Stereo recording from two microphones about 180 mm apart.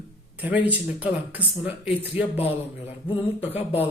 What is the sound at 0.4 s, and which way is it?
Speech, 10° right (ahead or behind).